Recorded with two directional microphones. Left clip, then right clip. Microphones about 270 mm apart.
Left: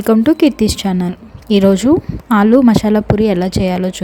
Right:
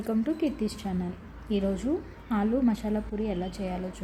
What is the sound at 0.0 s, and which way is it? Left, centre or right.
Speech, left.